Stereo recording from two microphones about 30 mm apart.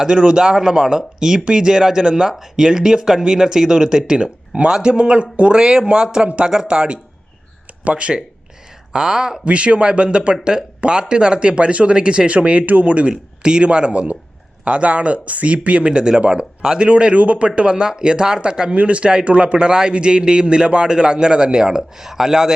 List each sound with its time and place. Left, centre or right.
0.1 s a man's voice: right
1.7 s a man's voice: centre
2.0 s speech: right
2.7 s a man's voice: right
6.2 s speech: right
6.7 s speech: right
8.9 s a man's voice: right
9.4 s speech: right
13.1 s speech: right
14.6 s speech: right
16.8 s a man's voice: right
18.7 s speech: right
19.5 s a man's voice: right